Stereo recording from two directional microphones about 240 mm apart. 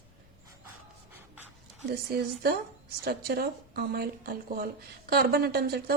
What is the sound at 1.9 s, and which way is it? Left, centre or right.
Speech, right.